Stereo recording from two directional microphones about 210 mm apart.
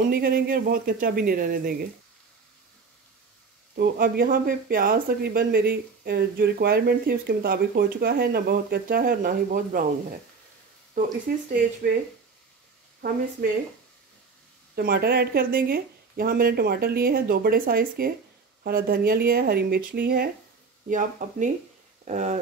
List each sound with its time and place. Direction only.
0.1 s speech: 45° right (ahead or behind)
3.7 s speech: 45° right (ahead or behind)
11.3 s speech: 45° right (ahead or behind)
13.4 s speech: 50° right (ahead or behind)
14.8 s speech: 50° right (ahead or behind)